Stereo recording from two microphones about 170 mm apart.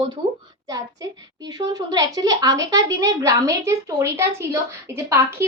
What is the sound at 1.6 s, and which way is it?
A woman's voice, 20° right (ahead or behind).